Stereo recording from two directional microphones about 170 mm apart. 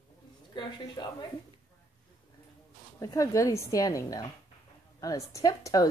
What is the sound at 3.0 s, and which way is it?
A woman's voice, 20° left (ahead or behind).